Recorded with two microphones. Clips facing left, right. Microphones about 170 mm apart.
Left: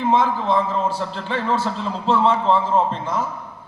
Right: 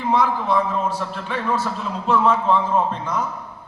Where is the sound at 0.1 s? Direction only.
25° left (ahead or behind).